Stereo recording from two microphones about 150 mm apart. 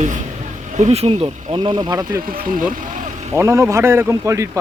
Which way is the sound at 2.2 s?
70° right (ahead or behind).